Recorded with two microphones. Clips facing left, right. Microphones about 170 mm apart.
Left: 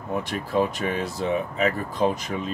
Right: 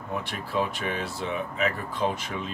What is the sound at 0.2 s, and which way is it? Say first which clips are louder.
Speech: left 6 dB; 40° left (ahead or behind).